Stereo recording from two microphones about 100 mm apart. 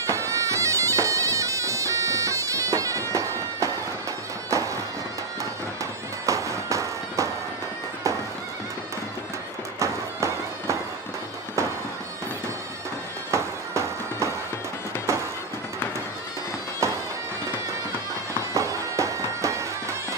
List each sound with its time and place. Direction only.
0.0 s bagpipes: 30° right (ahead or behind)
6.2 s music: 30° right (ahead or behind)
9.8 s music: 30° right (ahead or behind)
13.3 s music: 30° right (ahead or behind)
16.8 s music: 30° right (ahead or behind)
18.5 s music: 30° right (ahead or behind)